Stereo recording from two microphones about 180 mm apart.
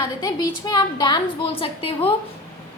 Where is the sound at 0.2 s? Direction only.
20° left (ahead or behind).